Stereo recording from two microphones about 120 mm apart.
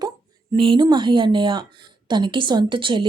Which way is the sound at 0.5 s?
45° right (ahead or behind).